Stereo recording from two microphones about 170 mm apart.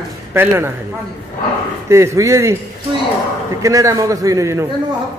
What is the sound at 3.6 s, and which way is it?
A man's voice, 20° right (ahead or behind).